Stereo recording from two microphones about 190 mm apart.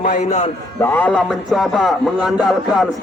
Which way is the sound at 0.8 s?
10° left (ahead or behind).